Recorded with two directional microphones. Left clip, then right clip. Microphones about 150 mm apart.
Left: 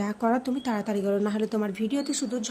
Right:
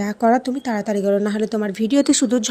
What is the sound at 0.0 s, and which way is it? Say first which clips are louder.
A woman's voice: right 9 dB; 30° right (ahead or behind).